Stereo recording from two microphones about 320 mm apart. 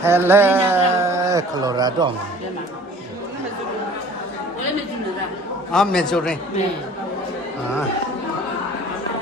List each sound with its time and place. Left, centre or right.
0.0 s a man's voice: centre
5.7 s a man's voice: centre